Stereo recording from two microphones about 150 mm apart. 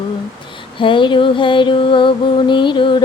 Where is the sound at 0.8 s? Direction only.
35° left (ahead or behind).